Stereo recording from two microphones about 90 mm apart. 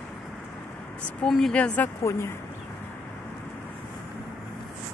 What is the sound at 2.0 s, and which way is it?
Speech, 30° left (ahead or behind).